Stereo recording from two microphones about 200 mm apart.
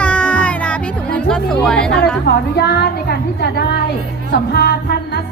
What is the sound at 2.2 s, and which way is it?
A woman's voice, 55° left (ahead or behind).